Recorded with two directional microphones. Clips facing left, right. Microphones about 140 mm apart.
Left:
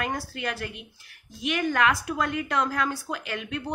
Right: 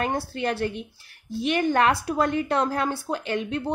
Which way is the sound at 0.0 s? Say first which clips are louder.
Right 5 dB; 30° right (ahead or behind).